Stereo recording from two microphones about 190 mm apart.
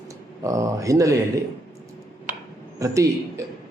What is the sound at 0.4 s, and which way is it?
Speech, 15° right (ahead or behind).